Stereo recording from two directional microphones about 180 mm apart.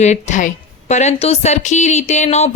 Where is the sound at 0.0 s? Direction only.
40° left (ahead or behind).